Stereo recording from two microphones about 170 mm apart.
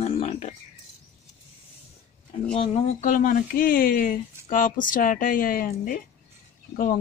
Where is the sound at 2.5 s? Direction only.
35° left (ahead or behind).